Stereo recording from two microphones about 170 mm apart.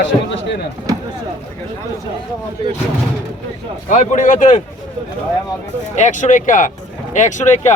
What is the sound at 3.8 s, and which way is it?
Speech, 45° left (ahead or behind).